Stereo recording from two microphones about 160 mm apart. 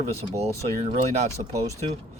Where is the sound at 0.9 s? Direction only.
45° right (ahead or behind).